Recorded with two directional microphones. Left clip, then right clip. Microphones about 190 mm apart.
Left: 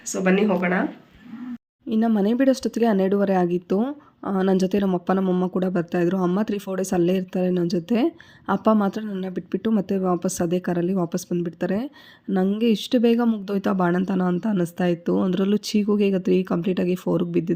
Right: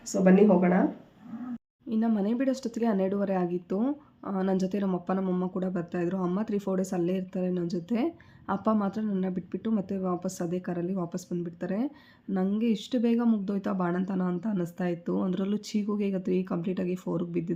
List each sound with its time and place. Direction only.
0.0 s speech: 10° right (ahead or behind)
1.9 s speech: 40° left (ahead or behind)